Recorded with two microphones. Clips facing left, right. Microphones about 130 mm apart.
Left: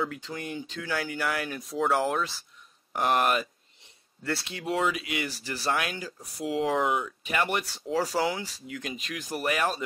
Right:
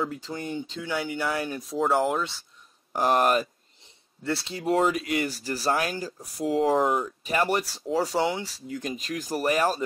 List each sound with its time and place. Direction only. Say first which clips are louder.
0.3 s speech: right 3 dB; 30° right (ahead or behind)
1.6 s speech: right 2 dB; centre (ahead or behind)
2.9 s speech: right 3 dB; 30° right (ahead or behind)
4.2 s speech: right 3 dB; centre (ahead or behind)
4.5 s speech: right 5 dB; 40° right (ahead or behind)
7.6 s speech: right 2 dB; centre (ahead or behind)
8.2 s speech: right 2 dB; 25° right (ahead or behind)
8.6 s speech: right 4 dB; 35° right (ahead or behind)